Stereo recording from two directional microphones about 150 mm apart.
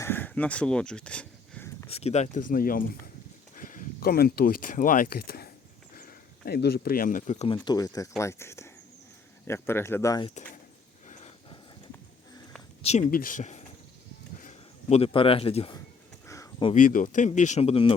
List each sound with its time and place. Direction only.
0.0 s a sound: 15° left (ahead or behind)
1.9 s speech: 45° left (ahead or behind)
7.4 s speech: 30° left (ahead or behind)
12.8 s speech: 45° left (ahead or behind)
13.1 s speech: 70° left (ahead or behind); by 15.7 s 40° left (ahead or behind)
16.2 s a sound: 20° left (ahead or behind)
16.7 s speech: 60° left (ahead or behind); by 17.9 s 40° left (ahead or behind)